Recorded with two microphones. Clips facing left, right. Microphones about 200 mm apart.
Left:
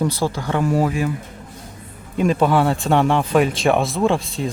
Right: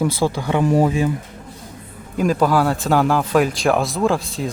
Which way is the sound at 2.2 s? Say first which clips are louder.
Even; centre (ahead or behind).